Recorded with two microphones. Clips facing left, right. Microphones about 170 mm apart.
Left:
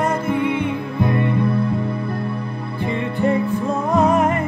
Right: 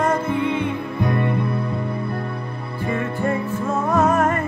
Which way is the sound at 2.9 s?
15° left (ahead or behind).